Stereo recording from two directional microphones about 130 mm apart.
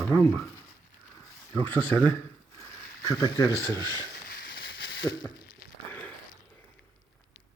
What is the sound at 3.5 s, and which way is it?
Speech, 30° right (ahead or behind).